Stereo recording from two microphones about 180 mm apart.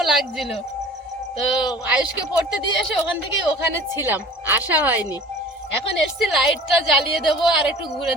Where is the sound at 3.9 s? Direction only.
15° right (ahead or behind).